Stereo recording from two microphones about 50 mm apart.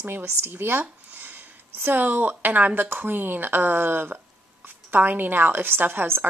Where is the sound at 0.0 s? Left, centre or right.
Right.